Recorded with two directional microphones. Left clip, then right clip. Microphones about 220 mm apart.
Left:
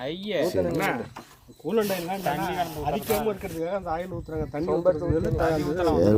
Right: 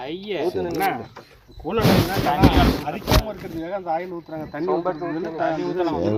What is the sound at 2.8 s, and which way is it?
A man's voice, 45° left (ahead or behind).